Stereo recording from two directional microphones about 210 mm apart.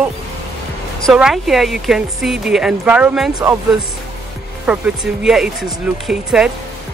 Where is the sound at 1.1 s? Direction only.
Centre (ahead or behind).